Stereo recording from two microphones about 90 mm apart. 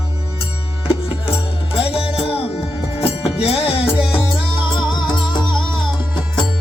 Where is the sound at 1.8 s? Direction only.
90° left.